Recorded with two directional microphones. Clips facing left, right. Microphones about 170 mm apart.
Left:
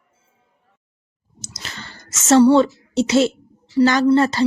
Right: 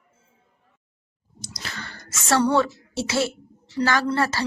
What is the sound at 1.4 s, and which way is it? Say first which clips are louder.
Whispering: even; 25° left (ahead or behind).